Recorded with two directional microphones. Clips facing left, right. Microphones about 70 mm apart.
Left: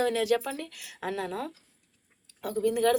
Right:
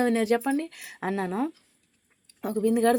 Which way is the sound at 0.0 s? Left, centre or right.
Right.